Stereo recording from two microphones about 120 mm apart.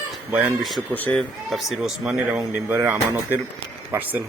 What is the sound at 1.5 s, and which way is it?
Speech, centre (ahead or behind).